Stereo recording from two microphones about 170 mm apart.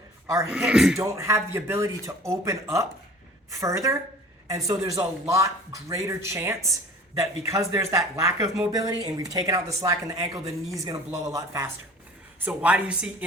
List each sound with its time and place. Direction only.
0.5 s speech: 5° right (ahead or behind)
0.9 s a man's voice: 15° right (ahead or behind)
12.5 s speech: 5° right (ahead or behind)